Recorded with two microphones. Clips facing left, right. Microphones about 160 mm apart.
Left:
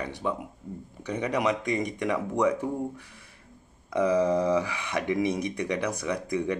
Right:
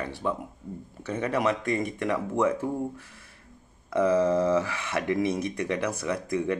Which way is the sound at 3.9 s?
15° left (ahead or behind).